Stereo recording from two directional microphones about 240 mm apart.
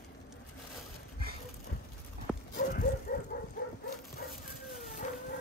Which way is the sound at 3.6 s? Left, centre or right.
Left.